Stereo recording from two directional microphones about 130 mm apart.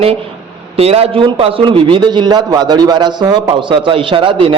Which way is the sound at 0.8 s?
50° right (ahead or behind).